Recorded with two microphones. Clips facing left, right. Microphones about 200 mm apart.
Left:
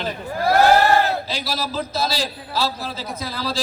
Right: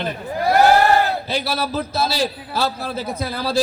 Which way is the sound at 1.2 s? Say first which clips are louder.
Right 4 dB; 55° right (ahead or behind).